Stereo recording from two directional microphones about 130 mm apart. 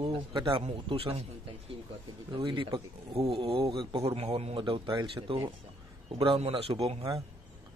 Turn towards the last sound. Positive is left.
turn(degrees=-50)  # may be behind; listen again after turning